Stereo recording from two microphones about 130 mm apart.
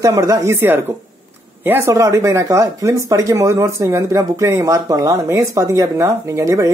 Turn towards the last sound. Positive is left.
turn(degrees=-25)  # may be behind; listen again after turning